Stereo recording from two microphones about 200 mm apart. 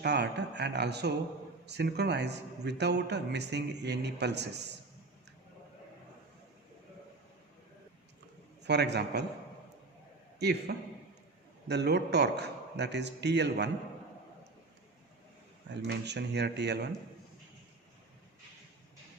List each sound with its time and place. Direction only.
0.0 s a man's voice: 55° right (ahead or behind)
8.6 s a man's voice: 55° right (ahead or behind)
10.4 s a man's voice: 55° right (ahead or behind)
15.7 s a man's voice: 60° right (ahead or behind)